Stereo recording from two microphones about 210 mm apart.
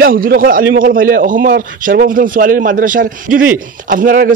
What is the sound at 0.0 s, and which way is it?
Speech, 45° right (ahead or behind).